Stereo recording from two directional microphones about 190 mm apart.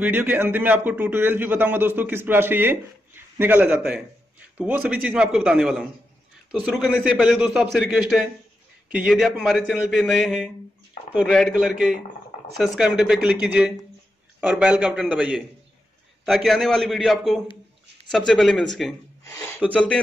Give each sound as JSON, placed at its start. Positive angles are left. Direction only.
{"t": 0.0, "sound": "a man's voice", "side_deg": -10}
{"t": 19.2, "sound": "a sound", "side_deg": 15}
{"t": 19.7, "sound": "a man's voice", "side_deg": 5}